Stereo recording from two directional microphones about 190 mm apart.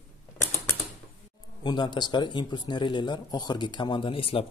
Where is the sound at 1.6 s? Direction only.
25° left (ahead or behind).